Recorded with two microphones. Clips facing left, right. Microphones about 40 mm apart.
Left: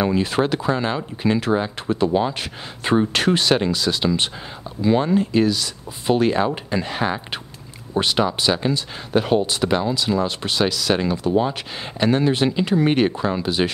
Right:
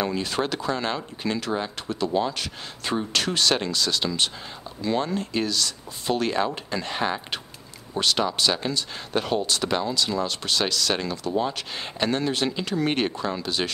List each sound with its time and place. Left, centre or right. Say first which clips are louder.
0.0 s speech: left 6 dB; centre
7.9 s speech: left 4 dB; centre